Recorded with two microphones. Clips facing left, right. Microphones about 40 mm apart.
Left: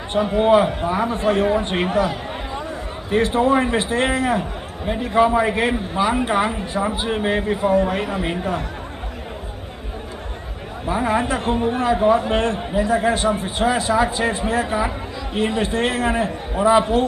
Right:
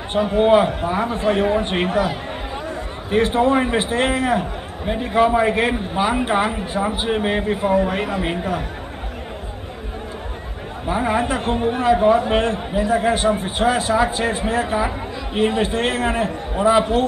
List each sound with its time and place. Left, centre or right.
0.4 s a man's voice: centre
3.1 s a man's voice: centre
10.9 s a man's voice: centre